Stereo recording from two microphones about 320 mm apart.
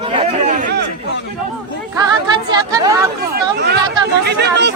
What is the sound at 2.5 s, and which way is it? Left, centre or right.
Speech, centre.